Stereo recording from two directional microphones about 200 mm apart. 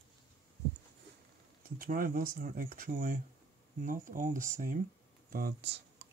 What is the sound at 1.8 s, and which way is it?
Speech, 45° right (ahead or behind).